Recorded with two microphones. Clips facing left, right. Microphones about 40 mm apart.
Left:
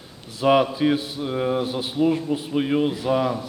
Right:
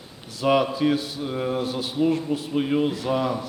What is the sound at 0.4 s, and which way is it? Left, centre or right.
A man's voice, centre.